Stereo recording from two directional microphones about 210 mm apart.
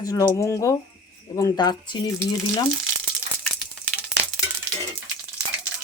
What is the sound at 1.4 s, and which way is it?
Speech, 20° left (ahead or behind).